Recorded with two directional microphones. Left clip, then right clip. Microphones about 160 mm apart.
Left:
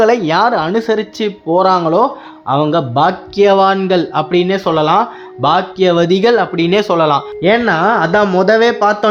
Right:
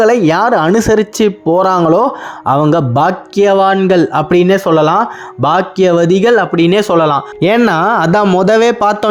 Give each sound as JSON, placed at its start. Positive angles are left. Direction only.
{"t": 0.0, "sound": "speech", "side_deg": -30}
{"t": 6.1, "sound": "speech", "side_deg": -25}
{"t": 7.3, "sound": "speech", "side_deg": -55}
{"t": 8.4, "sound": "speech", "side_deg": -40}